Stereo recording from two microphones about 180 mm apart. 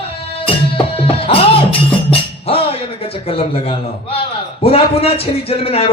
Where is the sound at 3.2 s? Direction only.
30° left (ahead or behind).